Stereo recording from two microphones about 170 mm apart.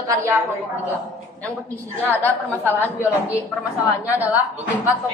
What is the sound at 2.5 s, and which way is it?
Speech, 10° right (ahead or behind).